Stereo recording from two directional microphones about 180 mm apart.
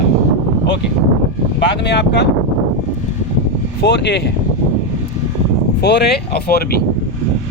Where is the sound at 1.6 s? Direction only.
70° left (ahead or behind).